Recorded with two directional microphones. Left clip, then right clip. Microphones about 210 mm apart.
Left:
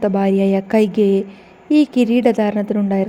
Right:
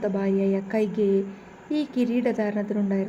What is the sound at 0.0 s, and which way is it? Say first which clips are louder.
A woman's voice: left 8 dB; 40° left (ahead or behind).